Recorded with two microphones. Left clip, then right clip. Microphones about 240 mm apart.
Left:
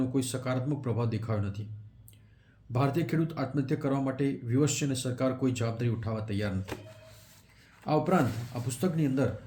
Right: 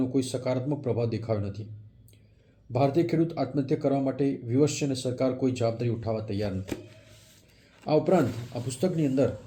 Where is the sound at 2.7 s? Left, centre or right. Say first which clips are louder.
Right 6 dB; centre.